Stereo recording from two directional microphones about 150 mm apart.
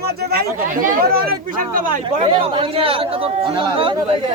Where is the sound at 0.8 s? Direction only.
75° right (ahead or behind).